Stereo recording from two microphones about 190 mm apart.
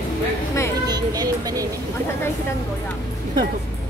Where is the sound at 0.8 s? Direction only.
20° right (ahead or behind).